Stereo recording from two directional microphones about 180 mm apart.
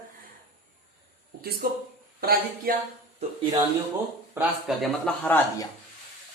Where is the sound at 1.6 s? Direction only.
55° right (ahead or behind).